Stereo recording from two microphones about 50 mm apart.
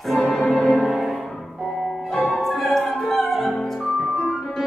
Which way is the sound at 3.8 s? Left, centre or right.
Left.